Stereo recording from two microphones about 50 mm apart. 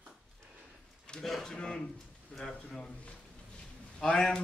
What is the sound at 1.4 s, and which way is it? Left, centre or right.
Speech, centre.